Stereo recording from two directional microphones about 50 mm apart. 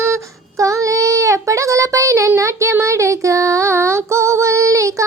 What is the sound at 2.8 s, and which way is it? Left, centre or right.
Female singing, right.